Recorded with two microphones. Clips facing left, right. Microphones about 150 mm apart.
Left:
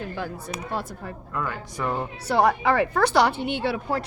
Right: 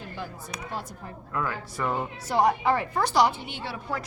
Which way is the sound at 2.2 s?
70° left (ahead or behind).